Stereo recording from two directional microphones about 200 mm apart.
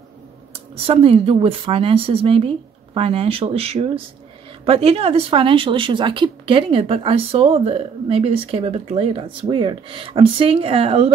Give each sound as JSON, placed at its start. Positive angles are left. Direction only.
{"t": 0.8, "sound": "speech", "side_deg": -30}